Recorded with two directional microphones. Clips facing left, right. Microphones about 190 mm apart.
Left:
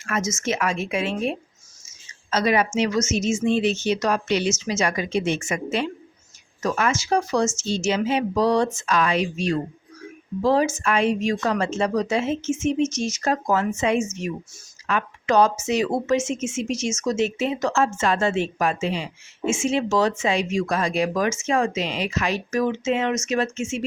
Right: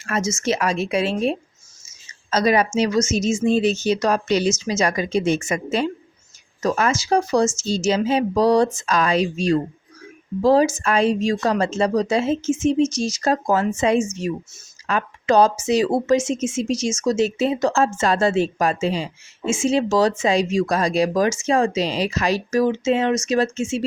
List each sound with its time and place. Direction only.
0.0 s speech: 30° right (ahead or behind)